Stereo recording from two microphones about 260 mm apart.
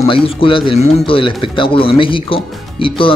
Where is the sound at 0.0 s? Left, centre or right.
Left.